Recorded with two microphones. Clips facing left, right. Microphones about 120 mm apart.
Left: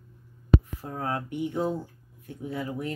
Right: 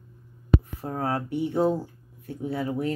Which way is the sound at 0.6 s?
35° right (ahead or behind).